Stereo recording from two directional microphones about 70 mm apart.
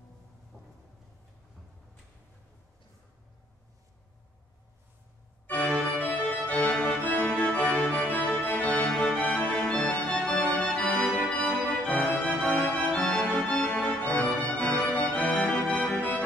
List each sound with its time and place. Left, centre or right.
0.5 s a sound: left
5.5 s organ: left
10.8 s music: left